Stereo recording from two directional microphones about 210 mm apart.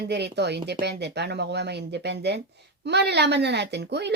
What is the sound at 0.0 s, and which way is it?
Speech, 55° right (ahead or behind).